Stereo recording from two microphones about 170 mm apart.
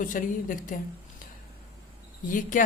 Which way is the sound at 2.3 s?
50° left (ahead or behind).